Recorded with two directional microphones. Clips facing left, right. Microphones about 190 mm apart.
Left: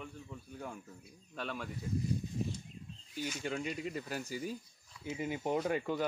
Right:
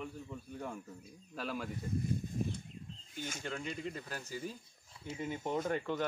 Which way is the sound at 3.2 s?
50° right (ahead or behind).